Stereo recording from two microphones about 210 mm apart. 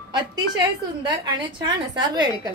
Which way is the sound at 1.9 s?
20° right (ahead or behind).